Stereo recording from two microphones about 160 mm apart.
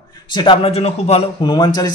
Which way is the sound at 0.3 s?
30° left (ahead or behind).